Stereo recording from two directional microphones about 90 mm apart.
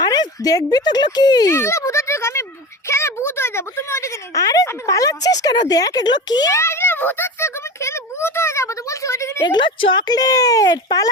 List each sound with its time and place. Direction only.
0.0 s speech: 50° left (ahead or behind)
1.5 s speech: 30° left (ahead or behind)
4.4 s speech: 40° left (ahead or behind)
6.5 s speech: 30° left (ahead or behind)
9.4 s speech: 55° left (ahead or behind)